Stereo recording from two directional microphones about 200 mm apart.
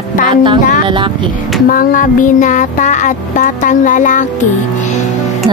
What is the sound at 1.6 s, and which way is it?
Music, 45° left (ahead or behind).